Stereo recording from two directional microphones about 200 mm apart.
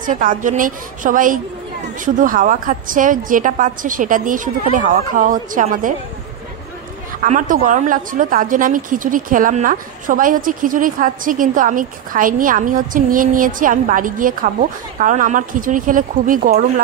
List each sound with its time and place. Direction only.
0.0 s a woman's voice: 40° right (ahead or behind)
7.2 s a woman's voice: 40° right (ahead or behind)